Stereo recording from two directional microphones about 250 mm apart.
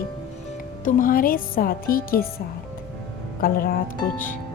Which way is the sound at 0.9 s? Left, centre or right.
Left.